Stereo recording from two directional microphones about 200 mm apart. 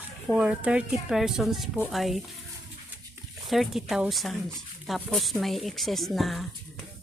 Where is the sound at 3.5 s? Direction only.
Centre (ahead or behind).